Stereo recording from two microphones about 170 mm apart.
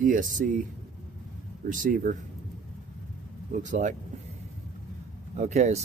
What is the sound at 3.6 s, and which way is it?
Speech, 45° right (ahead or behind).